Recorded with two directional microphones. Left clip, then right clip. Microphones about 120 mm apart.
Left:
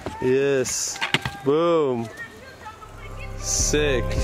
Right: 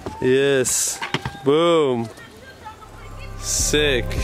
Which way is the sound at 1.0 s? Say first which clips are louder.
Left 2 dB; 20° left (ahead or behind).